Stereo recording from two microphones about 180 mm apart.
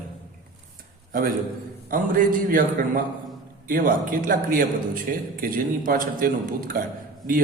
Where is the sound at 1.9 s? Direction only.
50° right (ahead or behind).